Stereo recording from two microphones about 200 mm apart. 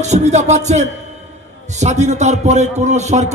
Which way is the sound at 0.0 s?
35° right (ahead or behind).